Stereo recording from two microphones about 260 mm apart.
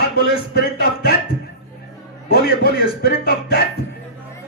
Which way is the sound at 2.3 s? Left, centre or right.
Left.